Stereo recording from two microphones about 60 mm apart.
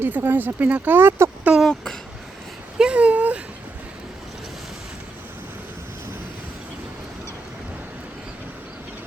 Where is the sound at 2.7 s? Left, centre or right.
Centre.